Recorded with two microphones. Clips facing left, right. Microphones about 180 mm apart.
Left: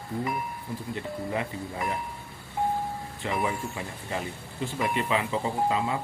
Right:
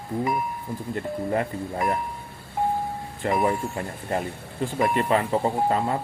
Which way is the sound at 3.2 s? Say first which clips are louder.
Right 6 dB; 45° right (ahead or behind).